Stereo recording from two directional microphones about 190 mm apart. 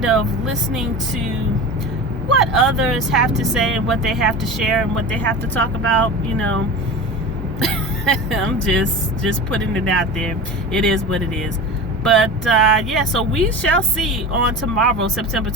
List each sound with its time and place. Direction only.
0.0 s speech: centre (ahead or behind)
2.4 s speech: centre (ahead or behind)
7.6 s speech: 5° left (ahead or behind)